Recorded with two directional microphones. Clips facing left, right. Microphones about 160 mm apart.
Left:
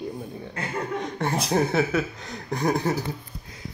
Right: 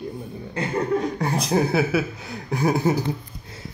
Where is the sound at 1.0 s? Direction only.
Centre (ahead or behind).